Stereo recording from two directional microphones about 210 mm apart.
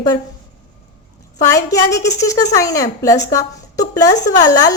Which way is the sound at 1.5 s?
15° left (ahead or behind).